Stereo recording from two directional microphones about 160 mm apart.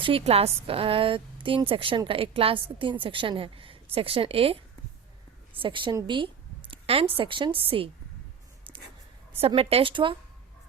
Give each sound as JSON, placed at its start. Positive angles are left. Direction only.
{"t": 0.0, "sound": "a woman's voice", "side_deg": -35}
{"t": 9.5, "sound": "a woman's voice", "side_deg": -35}